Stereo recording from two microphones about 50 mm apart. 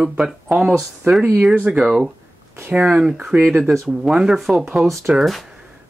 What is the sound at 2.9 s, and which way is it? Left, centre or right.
Speech, centre.